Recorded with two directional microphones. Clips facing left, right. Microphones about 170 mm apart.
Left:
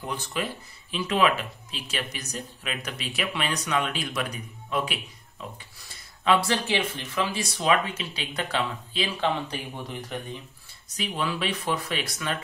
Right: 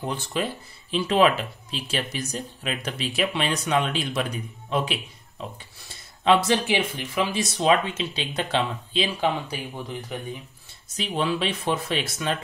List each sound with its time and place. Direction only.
0.0 s speech: 30° right (ahead or behind)
6.2 s speech: 15° right (ahead or behind)
7.5 s speech: 25° right (ahead or behind)
9.2 s speech: 5° right (ahead or behind)
11.0 s speech: 25° right (ahead or behind)